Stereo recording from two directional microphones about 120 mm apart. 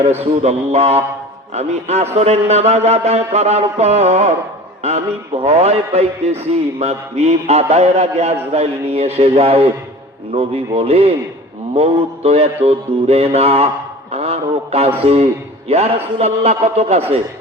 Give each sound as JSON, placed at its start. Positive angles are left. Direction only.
{"t": 0.2, "sound": "a man's voice", "side_deg": -65}